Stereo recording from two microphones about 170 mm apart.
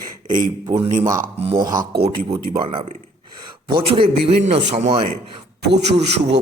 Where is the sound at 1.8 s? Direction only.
70° right (ahead or behind).